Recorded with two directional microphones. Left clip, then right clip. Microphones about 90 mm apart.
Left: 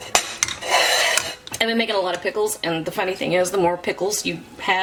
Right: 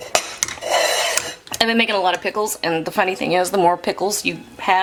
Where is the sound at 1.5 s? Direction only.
50° right (ahead or behind).